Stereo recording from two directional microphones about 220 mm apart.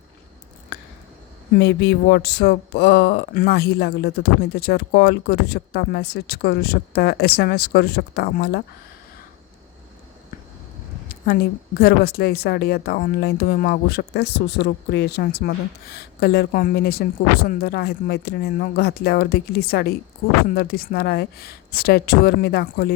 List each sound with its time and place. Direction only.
1.5 s a woman's voice: 50° left (ahead or behind)
11.3 s a woman's voice: 45° left (ahead or behind)